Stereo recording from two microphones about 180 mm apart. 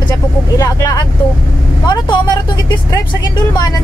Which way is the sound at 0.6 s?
20° left (ahead or behind).